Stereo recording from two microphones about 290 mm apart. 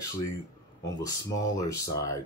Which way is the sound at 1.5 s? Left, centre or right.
Centre.